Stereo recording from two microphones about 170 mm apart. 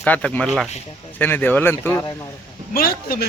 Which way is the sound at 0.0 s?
5° left (ahead or behind).